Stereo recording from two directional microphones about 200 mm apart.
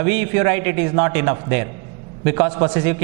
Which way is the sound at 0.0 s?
15° right (ahead or behind).